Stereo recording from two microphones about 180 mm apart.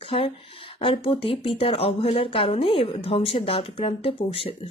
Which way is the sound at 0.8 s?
30° left (ahead or behind).